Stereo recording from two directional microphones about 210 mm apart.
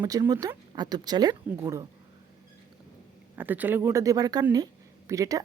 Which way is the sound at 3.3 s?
10° right (ahead or behind).